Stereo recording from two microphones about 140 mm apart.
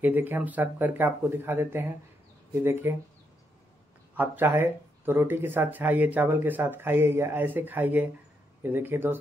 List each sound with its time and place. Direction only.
0.0 s speech: 15° right (ahead or behind)
4.2 s speech: 15° right (ahead or behind)